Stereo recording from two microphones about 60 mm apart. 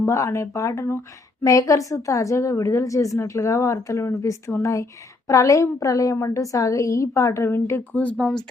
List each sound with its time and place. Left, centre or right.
0.0 s a woman's voice: left
1.5 s a woman's voice: left
6.1 s a woman's voice: left
8.2 s speech: centre